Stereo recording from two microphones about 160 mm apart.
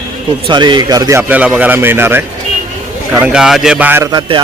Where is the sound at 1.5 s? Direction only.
10° right (ahead or behind).